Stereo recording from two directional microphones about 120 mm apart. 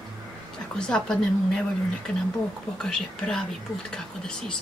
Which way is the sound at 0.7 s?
5° left (ahead or behind).